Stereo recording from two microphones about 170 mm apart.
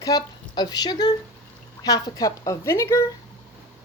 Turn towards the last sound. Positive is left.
turn(degrees=15)  # may be behind; listen again after turning